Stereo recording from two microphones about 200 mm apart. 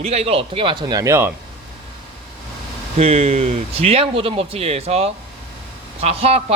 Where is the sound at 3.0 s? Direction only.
30° right (ahead or behind).